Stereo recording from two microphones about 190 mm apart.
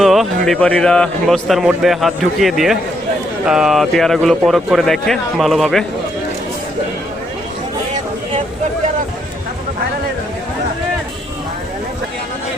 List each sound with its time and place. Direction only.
0.0 s speech: centre (ahead or behind)